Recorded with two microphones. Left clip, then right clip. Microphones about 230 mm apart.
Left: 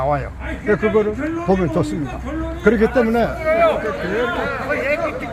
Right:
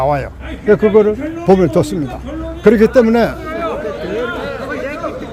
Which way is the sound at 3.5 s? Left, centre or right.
Left.